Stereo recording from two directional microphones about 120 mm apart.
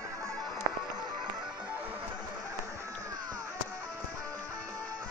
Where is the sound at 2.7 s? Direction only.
30° right (ahead or behind).